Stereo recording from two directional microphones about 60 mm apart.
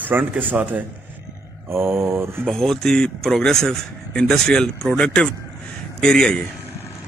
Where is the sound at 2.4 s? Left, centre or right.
Centre.